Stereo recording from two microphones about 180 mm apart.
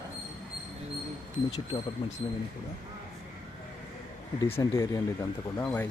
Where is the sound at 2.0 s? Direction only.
25° left (ahead or behind).